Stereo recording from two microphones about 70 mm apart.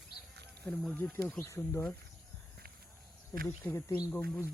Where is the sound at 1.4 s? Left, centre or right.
Left.